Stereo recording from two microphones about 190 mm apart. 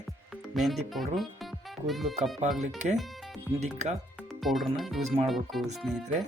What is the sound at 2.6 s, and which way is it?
Speech, 40° right (ahead or behind).